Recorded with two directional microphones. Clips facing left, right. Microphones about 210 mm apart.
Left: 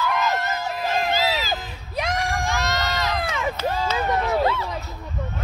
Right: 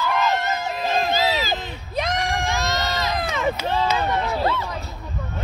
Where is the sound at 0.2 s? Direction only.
25° right (ahead or behind).